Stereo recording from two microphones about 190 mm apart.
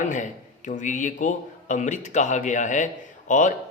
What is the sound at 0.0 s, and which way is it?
A man's voice, 40° left (ahead or behind).